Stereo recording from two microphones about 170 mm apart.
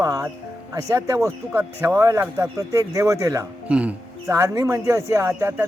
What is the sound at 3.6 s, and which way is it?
Speech, 10° right (ahead or behind).